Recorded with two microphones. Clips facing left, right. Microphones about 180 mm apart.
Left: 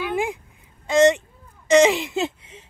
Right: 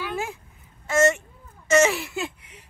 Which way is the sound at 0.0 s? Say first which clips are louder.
Left 6 dB; 15° left (ahead or behind).